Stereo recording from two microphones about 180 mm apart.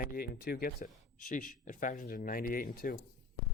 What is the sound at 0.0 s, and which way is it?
Speech, 55° left (ahead or behind).